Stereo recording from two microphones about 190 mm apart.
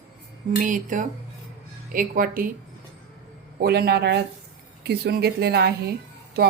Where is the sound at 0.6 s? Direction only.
45° right (ahead or behind).